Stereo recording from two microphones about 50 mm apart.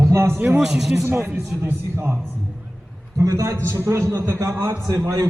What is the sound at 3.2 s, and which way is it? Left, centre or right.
A man's voice, right.